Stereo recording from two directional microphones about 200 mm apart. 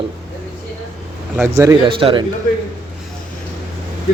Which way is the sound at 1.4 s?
15° right (ahead or behind).